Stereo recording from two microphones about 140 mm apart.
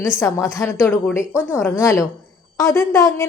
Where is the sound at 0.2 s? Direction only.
20° left (ahead or behind).